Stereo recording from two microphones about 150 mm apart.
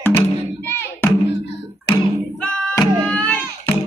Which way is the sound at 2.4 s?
5° left (ahead or behind).